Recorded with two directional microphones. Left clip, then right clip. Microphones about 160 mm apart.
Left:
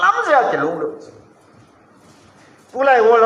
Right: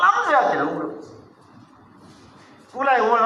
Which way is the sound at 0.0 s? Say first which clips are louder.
Left 3 dB; 30° left (ahead or behind).